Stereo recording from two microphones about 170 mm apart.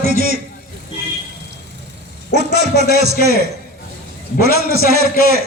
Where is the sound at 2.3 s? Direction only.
75° right (ahead or behind).